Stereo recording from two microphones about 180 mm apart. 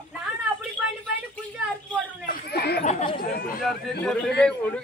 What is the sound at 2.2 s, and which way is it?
Speech, 60° left (ahead or behind).